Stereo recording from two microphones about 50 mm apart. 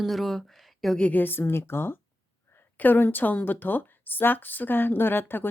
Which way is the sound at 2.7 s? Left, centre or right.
Left.